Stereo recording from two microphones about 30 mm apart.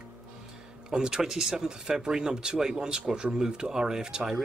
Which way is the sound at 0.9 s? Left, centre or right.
Right.